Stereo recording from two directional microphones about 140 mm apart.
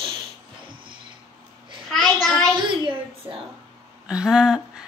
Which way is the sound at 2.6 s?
35° right (ahead or behind).